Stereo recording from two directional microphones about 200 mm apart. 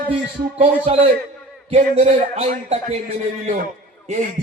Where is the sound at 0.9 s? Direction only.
30° right (ahead or behind).